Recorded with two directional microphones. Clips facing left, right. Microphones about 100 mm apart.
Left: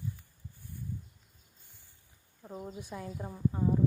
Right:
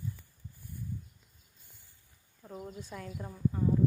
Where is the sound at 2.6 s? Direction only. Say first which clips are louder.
Left 2 dB; 15° left (ahead or behind).